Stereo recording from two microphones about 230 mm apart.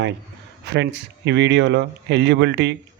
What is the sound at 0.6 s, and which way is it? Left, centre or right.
Speech, right.